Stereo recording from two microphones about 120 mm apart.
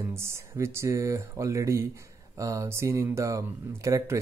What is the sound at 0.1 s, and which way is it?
Speech, 20° right (ahead or behind).